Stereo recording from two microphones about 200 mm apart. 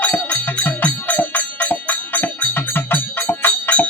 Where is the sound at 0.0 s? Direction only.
10° left (ahead or behind).